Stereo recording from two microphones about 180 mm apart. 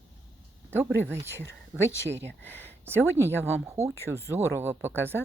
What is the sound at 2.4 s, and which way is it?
Speech, 10° left (ahead or behind).